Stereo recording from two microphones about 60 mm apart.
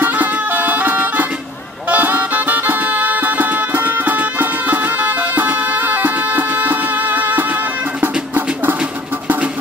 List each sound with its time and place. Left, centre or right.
0.0 s music: right